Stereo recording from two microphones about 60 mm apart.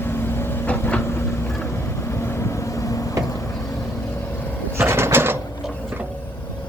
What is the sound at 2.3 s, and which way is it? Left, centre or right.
Vehicle, left.